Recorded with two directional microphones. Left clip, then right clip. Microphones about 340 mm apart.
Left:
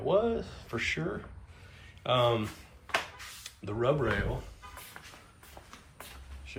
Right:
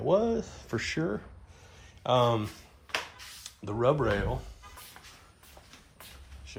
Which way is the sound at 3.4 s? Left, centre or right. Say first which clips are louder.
Right 3 dB; centre.